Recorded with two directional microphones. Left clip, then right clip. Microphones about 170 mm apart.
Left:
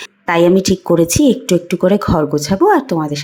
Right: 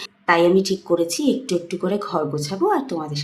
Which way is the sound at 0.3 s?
40° left (ahead or behind).